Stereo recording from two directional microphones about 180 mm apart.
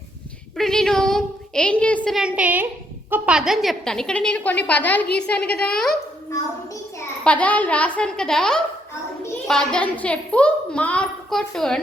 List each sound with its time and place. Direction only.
0.5 s a woman's voice: centre (ahead or behind)
7.3 s a child's voice: 10° left (ahead or behind)